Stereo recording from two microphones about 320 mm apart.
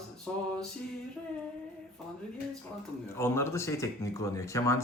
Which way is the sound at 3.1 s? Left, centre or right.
Centre.